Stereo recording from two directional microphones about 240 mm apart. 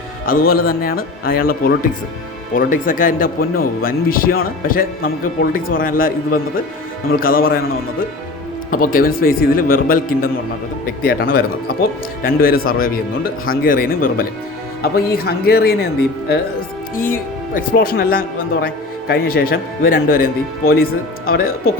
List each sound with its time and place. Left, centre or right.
0.3 s speech: left
8.7 s speech: left